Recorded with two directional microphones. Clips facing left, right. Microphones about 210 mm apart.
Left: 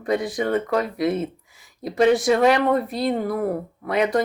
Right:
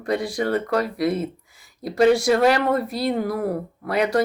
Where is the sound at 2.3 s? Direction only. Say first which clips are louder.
Left 1 dB; centre (ahead or behind).